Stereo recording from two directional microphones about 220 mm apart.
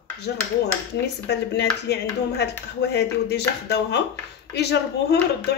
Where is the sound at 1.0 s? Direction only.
50° left (ahead or behind).